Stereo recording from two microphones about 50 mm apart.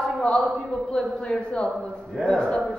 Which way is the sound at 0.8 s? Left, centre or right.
Centre.